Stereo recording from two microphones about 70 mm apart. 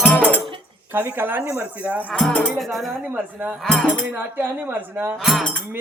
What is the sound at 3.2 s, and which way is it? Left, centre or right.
Speech, right.